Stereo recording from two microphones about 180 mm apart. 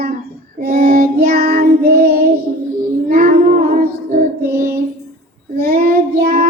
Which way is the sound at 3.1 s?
50° right (ahead or behind).